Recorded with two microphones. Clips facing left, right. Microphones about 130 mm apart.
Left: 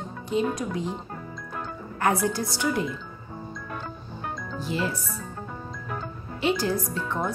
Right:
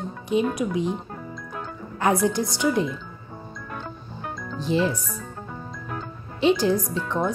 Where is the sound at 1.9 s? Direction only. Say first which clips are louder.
Right 3 dB; 20° right (ahead or behind).